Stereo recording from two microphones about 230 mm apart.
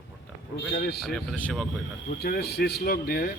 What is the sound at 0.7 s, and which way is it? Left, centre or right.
Speech, left.